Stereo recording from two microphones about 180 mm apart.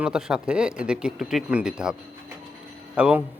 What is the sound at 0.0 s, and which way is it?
A man's voice, 5° right (ahead or behind).